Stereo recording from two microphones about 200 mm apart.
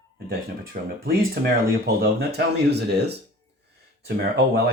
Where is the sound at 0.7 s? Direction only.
45° right (ahead or behind).